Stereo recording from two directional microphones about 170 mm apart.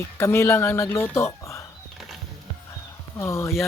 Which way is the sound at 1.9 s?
Centre (ahead or behind).